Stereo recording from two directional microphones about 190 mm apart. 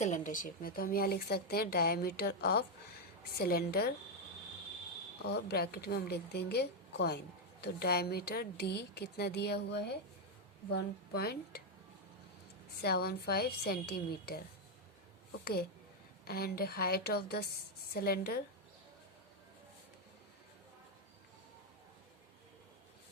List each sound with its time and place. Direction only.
0.0 s a woman's voice: 40° left (ahead or behind); by 3.9 s 55° left (ahead or behind)
5.2 s a woman's voice: 60° left (ahead or behind)
12.8 s a woman's voice: 55° left (ahead or behind)
16.2 s a woman's voice: 55° left (ahead or behind)